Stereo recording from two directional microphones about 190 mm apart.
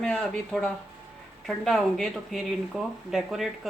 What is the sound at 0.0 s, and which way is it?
Speech, 5° left (ahead or behind).